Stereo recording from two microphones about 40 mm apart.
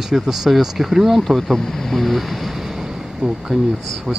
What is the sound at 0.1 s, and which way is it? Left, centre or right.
Speech, centre.